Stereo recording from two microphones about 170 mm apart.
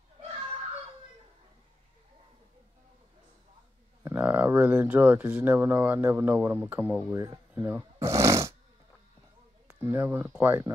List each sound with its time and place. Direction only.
4.0 s speech: 10° right (ahead or behind)
7.1 s snoring: 15° right (ahead or behind)
9.7 s speech: 15° right (ahead or behind)